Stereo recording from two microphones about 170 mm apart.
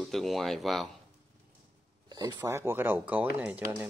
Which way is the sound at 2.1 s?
25° right (ahead or behind).